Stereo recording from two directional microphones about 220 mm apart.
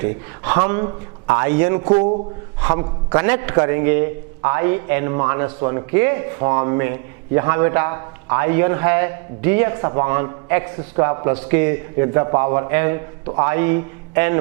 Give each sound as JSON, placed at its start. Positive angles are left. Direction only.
{"t": 0.0, "sound": "a man's voice", "side_deg": -15}